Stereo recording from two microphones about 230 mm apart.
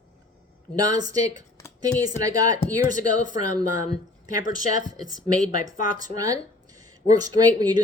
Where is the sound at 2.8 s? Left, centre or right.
Left.